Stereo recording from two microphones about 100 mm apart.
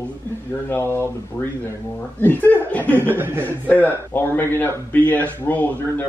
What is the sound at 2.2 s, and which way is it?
Speech, 20° left (ahead or behind).